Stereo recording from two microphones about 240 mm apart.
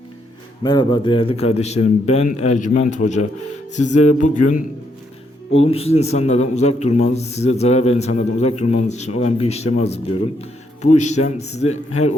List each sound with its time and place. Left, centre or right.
0.6 s a man's voice: centre
5.6 s a man's voice: left